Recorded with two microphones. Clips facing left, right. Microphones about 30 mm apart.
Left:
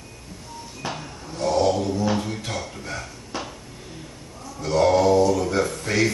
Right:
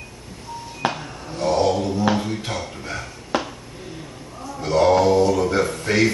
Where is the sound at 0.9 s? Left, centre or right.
Right.